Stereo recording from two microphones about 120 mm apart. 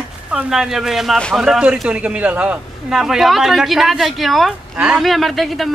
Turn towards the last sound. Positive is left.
turn(degrees=0)  # may be behind; listen again after turning